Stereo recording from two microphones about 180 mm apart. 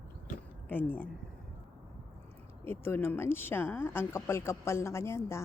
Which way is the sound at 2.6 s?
10° left (ahead or behind).